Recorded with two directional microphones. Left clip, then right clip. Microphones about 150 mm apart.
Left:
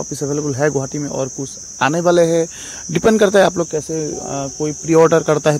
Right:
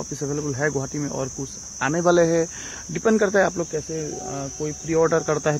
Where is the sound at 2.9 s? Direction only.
45° left (ahead or behind).